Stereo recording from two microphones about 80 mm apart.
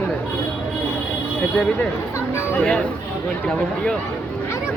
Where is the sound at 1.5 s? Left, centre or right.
Centre.